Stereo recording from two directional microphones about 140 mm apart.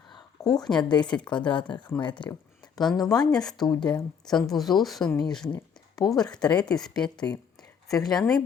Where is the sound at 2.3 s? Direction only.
20° left (ahead or behind).